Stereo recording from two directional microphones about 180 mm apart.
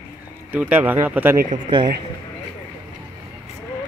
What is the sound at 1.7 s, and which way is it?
Speech, 25° right (ahead or behind).